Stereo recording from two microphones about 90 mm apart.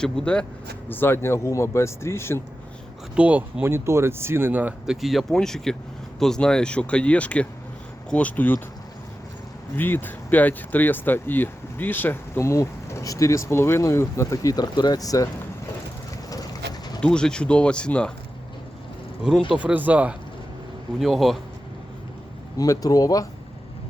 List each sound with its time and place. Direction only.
0.0 s speech: 10° left (ahead or behind)
0.9 s speech: 25° left (ahead or behind)
3.2 s speech: 15° right (ahead or behind)
3.6 s speech: 25° right (ahead or behind)
4.9 s speech: centre (ahead or behind); by 8.5 s 15° left (ahead or behind)
9.7 s speech: 25° left (ahead or behind); by 15.3 s 40° left (ahead or behind)
16.3 s pigeon: 45° left (ahead or behind)
17.0 s speech: 10° left (ahead or behind)
19.5 s speech: 15° right (ahead or behind)
21.0 s speech: centre (ahead or behind)
22.5 s speech: 40° left (ahead or behind)